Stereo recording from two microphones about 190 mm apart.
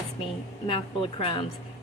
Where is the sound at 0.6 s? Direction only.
25° left (ahead or behind).